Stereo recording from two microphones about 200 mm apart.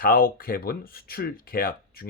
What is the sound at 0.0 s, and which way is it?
Speech, 45° left (ahead or behind).